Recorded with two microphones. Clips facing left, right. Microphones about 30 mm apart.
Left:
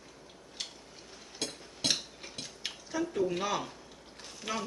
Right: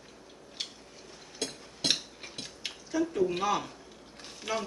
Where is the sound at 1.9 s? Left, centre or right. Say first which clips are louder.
Right 1 dB; centre.